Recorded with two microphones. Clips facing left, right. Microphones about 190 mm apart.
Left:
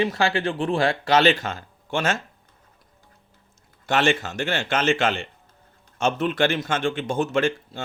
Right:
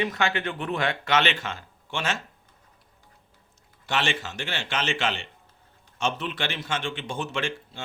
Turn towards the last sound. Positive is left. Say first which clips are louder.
# left 8 dB
turn(degrees=45)  # may be behind; listen again after turning